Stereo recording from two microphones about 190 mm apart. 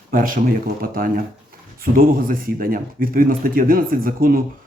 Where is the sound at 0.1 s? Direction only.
45° right (ahead or behind).